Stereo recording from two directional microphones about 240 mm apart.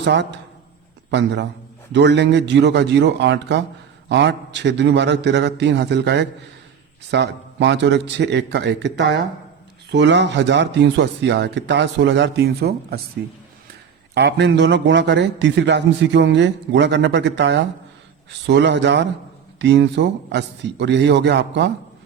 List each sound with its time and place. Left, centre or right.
0.0 s a man's voice: right
14.1 s a man's voice: right